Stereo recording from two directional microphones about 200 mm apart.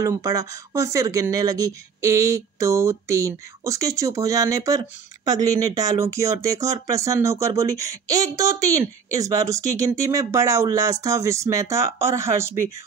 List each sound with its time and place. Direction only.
0.0 s speech: 15° right (ahead or behind)